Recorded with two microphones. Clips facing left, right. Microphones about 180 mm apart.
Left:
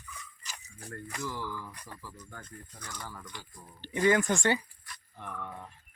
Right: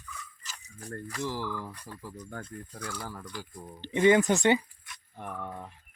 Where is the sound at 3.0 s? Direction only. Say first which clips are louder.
Right 4 dB; 35° right (ahead or behind).